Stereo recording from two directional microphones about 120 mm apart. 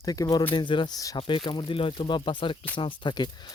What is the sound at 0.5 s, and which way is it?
Speech, 40° left (ahead or behind).